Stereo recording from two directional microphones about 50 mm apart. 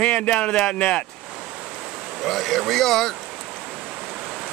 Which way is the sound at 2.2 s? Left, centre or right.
Centre.